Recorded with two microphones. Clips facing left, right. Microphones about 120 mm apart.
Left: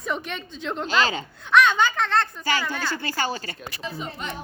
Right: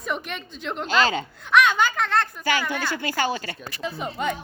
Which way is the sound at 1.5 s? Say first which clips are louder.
Even; 10° right (ahead or behind).